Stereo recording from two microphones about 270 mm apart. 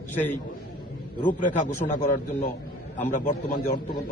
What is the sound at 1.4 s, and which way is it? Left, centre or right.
Speech, left.